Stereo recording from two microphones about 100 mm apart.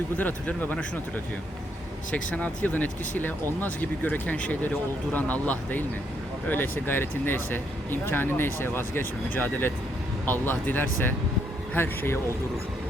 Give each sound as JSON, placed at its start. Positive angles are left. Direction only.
{"t": 0.2, "sound": "speech", "side_deg": 15}